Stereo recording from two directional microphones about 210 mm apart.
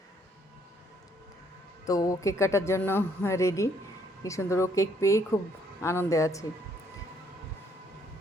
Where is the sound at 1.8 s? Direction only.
15° left (ahead or behind).